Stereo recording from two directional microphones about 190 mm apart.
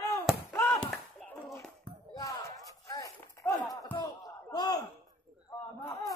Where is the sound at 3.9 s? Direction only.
20° left (ahead or behind).